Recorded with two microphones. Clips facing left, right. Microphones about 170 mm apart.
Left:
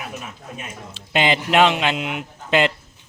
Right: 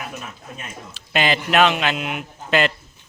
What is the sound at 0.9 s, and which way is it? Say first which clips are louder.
Speech: left 1 dB; 20° left (ahead or behind).